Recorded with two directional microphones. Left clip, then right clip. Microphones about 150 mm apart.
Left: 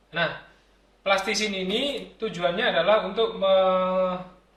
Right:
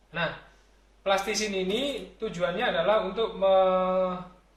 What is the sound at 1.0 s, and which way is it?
Speech, 20° right (ahead or behind).